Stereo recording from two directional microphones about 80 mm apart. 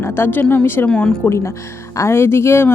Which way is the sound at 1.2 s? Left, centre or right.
Left.